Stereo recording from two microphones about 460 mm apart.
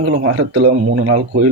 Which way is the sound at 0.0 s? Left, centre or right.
Right.